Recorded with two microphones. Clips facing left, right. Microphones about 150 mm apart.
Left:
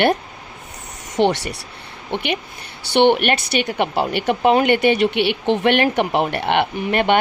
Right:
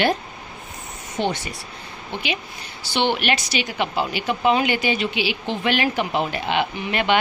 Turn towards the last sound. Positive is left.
turn(degrees=50)  # may be behind; listen again after turning